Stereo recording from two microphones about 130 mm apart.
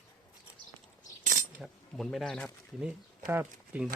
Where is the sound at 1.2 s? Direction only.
90° right.